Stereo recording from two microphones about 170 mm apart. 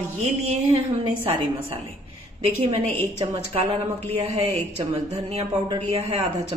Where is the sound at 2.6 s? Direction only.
35° right (ahead or behind).